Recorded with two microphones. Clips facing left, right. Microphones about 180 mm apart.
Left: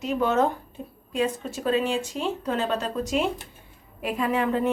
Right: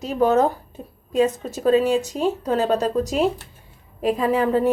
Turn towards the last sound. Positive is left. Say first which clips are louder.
# right 5 dB
turn(degrees=-35)  # may be behind; listen again after turning